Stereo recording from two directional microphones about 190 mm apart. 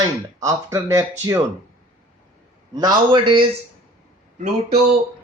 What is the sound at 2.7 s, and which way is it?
Speech, 20° right (ahead or behind).